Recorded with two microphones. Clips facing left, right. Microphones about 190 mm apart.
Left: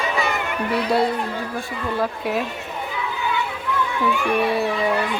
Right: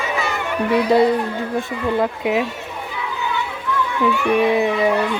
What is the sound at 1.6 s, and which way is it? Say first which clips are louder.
Speech: right 5 dB; 20° right (ahead or behind).